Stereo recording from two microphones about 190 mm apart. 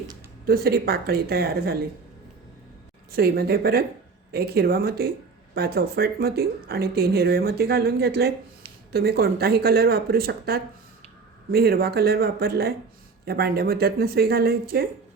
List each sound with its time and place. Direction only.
0.4 s speech: 55° right (ahead or behind)
3.1 s speech: 55° right (ahead or behind)